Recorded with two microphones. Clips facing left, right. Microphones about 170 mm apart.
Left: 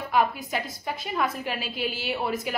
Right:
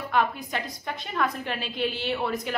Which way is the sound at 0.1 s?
5° left (ahead or behind).